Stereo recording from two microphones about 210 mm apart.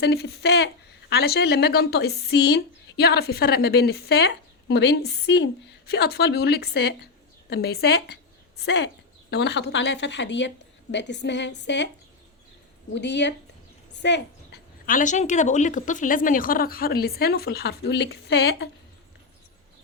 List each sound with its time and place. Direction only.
0.0 s a woman's voice: 50° left (ahead or behind)
12.9 s a woman's voice: 55° left (ahead or behind)
14.0 s a sound: 55° left (ahead or behind)
14.8 s a woman's voice: 35° left (ahead or behind)